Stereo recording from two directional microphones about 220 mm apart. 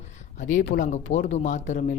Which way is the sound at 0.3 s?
35° left (ahead or behind).